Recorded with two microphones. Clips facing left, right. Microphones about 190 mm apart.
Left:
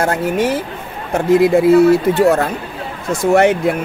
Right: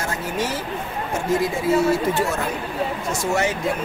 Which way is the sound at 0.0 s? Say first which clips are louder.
Left 9 dB; 60° left (ahead or behind).